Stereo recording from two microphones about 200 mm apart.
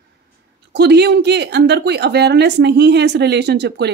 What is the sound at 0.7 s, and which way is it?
Speech, 55° right (ahead or behind).